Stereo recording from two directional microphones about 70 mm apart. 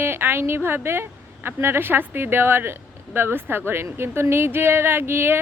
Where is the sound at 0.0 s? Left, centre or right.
Right.